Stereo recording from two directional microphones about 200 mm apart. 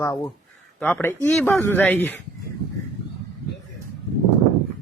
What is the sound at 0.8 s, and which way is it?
Speech, 5° left (ahead or behind).